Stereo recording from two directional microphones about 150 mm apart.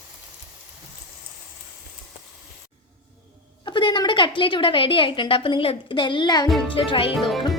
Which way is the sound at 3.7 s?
30° left (ahead or behind).